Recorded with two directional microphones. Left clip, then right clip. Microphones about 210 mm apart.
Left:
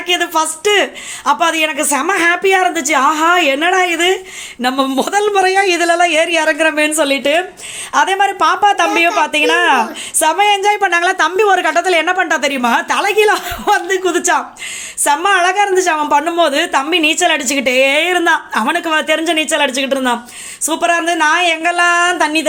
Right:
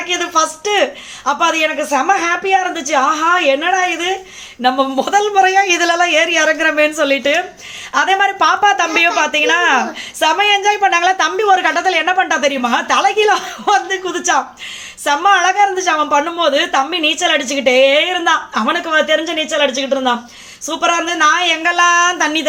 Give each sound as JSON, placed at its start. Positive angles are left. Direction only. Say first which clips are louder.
{"t": 0.1, "sound": "a woman's voice", "louder": "left 1 dB", "side_deg": 35}
{"t": 7.9, "sound": "a woman's voice", "louder": "even", "side_deg": 30}